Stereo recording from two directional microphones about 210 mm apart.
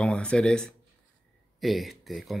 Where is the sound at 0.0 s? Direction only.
5° left (ahead or behind).